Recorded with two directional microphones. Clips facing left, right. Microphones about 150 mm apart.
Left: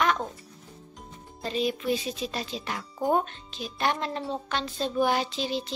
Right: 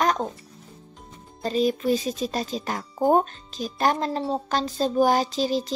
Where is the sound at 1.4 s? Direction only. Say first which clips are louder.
Right 5 dB; 40° right (ahead or behind).